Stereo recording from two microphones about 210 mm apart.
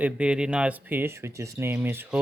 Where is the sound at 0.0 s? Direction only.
5° right (ahead or behind).